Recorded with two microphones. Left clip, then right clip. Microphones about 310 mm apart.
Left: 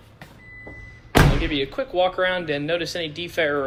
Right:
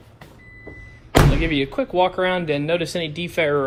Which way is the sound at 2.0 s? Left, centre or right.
Centre.